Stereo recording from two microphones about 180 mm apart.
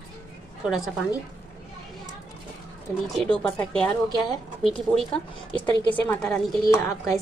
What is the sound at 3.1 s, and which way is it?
Speech, 5° left (ahead or behind).